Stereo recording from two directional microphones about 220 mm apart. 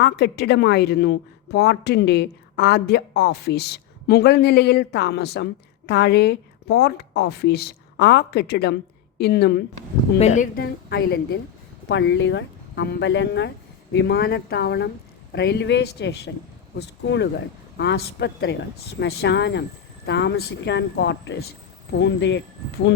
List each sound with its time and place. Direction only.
0.0 s speech: 50° left (ahead or behind)
10.2 s speech: 30° left (ahead or behind); by 22.4 s 55° left (ahead or behind)